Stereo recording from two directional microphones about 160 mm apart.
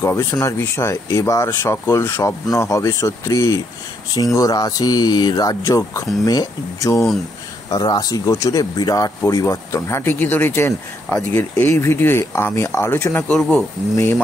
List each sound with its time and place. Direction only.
0.0 s speech: 15° left (ahead or behind)